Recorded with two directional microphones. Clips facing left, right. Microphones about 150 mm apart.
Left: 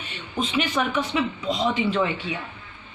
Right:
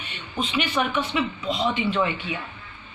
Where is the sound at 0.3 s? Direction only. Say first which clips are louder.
Left 1 dB; 40° left (ahead or behind).